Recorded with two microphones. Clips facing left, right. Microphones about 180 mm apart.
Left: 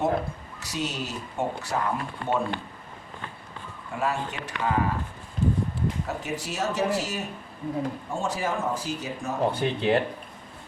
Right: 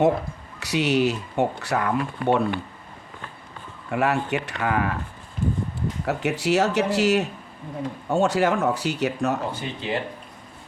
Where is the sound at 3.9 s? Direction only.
70° right (ahead or behind).